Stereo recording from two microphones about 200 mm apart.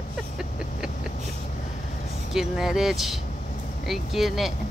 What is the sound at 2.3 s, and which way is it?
Speech, centre (ahead or behind).